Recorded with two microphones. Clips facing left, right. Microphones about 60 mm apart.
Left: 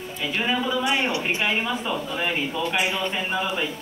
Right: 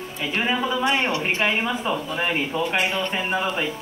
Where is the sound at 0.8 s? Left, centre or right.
Right.